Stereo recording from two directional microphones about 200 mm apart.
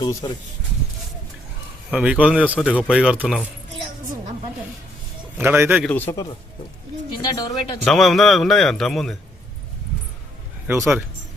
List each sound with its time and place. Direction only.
0.0 s a man's voice: 15° left (ahead or behind)
1.9 s a man's voice: 5° right (ahead or behind)
5.4 s a man's voice: 10° right (ahead or behind)
5.8 s a man's voice: 10° left (ahead or behind)
7.3 s speech: 20° left (ahead or behind)
7.9 s a man's voice: centre (ahead or behind)
10.7 s a man's voice: 10° right (ahead or behind)